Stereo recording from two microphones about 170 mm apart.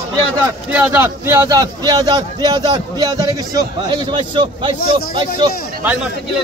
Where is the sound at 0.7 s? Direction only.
15° right (ahead or behind).